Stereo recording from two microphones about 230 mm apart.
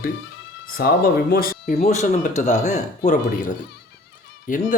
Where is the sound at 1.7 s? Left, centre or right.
Left.